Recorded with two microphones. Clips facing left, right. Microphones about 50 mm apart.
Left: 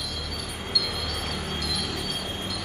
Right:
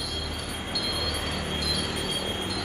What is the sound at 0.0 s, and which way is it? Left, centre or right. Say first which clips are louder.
Vehicle: right 1 dB; right.